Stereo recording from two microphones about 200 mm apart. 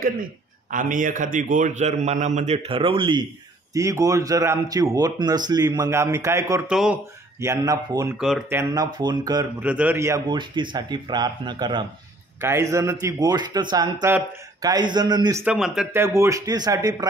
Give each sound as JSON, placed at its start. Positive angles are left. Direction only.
{"t": 0.0, "sound": "a man's voice", "side_deg": -45}
{"t": 6.7, "sound": "speech", "side_deg": -5}
{"t": 7.3, "sound": "a man's voice", "side_deg": -15}
{"t": 8.2, "sound": "speech", "side_deg": 0}
{"t": 8.5, "sound": "speech", "side_deg": -20}
{"t": 9.6, "sound": "speech", "side_deg": -5}
{"t": 15.4, "sound": "speech", "side_deg": -5}
{"t": 16.0, "sound": "a man's voice", "side_deg": -15}